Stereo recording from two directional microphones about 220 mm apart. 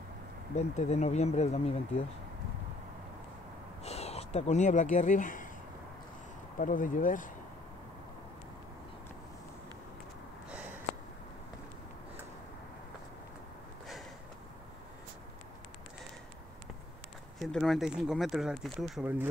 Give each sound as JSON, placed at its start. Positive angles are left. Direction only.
{"t": 0.6, "sound": "speech", "side_deg": 30}
{"t": 3.8, "sound": "speech", "side_deg": 30}
{"t": 6.6, "sound": "speech", "side_deg": 35}
{"t": 10.5, "sound": "snort", "side_deg": -5}
{"t": 17.4, "sound": "speech", "side_deg": 0}